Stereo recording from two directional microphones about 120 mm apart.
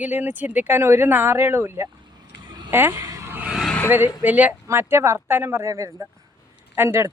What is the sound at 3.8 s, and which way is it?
Speech, 15° right (ahead or behind).